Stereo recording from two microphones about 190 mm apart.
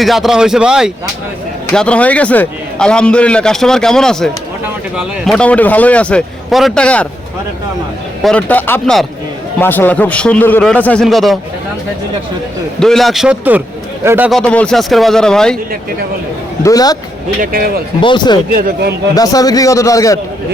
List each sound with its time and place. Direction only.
0.0 s a man's voice: centre (ahead or behind)
8.2 s a man's voice: 5° left (ahead or behind)
12.8 s a man's voice: centre (ahead or behind)
14.3 s a man's voice: 5° left (ahead or behind)
16.6 s speech: 20° left (ahead or behind)
17.4 s speech: 50° right (ahead or behind)
18.0 s speech: 25° left (ahead or behind)
18.5 s speech: 60° right (ahead or behind)
19.1 s a man's voice: 20° left (ahead or behind)